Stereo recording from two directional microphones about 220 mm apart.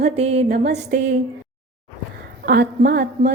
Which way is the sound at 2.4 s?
45° right (ahead or behind).